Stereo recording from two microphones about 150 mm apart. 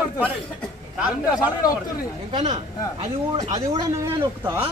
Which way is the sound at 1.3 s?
25° left (ahead or behind).